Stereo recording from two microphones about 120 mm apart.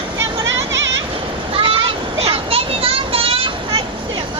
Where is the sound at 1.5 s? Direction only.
50° right (ahead or behind).